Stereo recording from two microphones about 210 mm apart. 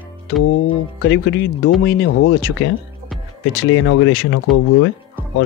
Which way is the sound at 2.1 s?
65° left (ahead or behind).